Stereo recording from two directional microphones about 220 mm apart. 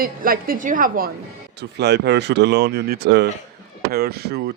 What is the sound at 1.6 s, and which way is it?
A woman's voice, 50° right (ahead or behind).